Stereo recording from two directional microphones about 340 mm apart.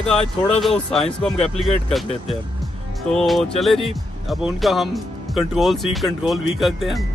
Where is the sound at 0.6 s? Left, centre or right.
Centre.